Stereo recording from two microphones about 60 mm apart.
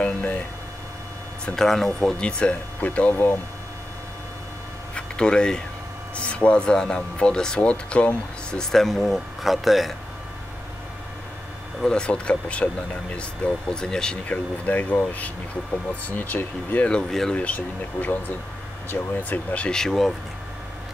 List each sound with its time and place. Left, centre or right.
0.0 s a sound: left
1.4 s speech: centre; by 3.2 s left
4.9 s a sound: centre
6.1 s speech: left
8.7 s speech: centre
11.8 s speech: centre
14.2 s speech: left
17.1 s speech: centre
17.6 s speech: left
19.7 s speech: centre